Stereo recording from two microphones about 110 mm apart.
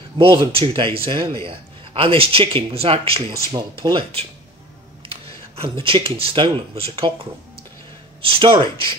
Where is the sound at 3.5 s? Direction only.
45° right (ahead or behind).